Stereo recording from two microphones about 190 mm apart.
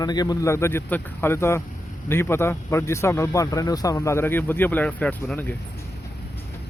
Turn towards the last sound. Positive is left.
turn(degrees=10)  # may be behind; listen again after turning